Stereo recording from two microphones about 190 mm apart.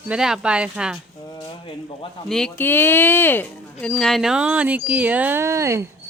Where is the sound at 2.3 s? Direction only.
5° left (ahead or behind); by 5.8 s 15° right (ahead or behind).